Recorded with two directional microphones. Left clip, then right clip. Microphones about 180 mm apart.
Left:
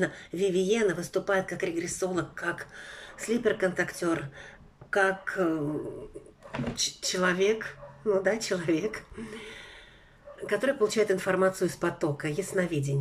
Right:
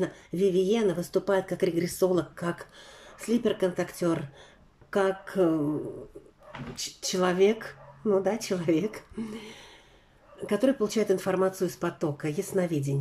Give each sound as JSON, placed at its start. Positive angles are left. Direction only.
{"t": 0.0, "sound": "speech", "side_deg": -20}
{"t": 6.8, "sound": "speech", "side_deg": -15}